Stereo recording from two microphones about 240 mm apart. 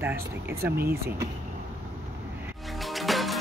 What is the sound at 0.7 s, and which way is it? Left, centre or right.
Speech, right.